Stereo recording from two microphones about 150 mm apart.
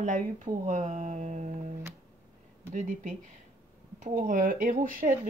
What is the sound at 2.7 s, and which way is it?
Speech, 55° right (ahead or behind).